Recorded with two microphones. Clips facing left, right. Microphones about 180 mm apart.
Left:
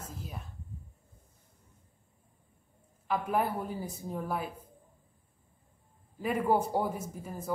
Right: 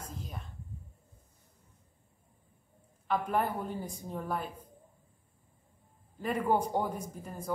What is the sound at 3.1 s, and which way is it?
A woman's voice, 5° left (ahead or behind).